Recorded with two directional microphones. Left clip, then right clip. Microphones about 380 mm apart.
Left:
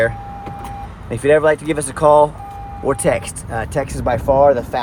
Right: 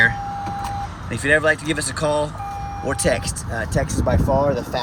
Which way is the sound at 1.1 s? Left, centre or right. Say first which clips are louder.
Left 4 dB; centre.